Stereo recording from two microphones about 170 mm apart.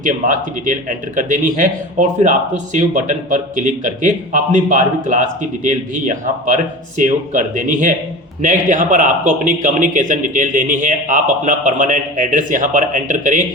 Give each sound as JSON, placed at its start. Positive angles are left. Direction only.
{"t": 0.0, "sound": "a man's voice", "side_deg": -50}